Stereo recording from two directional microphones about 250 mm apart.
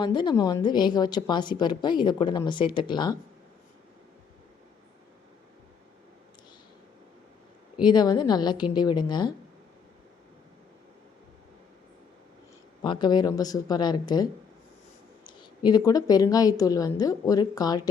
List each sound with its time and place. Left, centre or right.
0.0 s a woman's voice: centre
7.8 s a woman's voice: centre
12.8 s a woman's voice: centre
15.3 s a woman's voice: centre